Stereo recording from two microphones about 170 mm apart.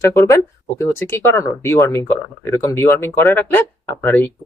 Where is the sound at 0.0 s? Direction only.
20° left (ahead or behind).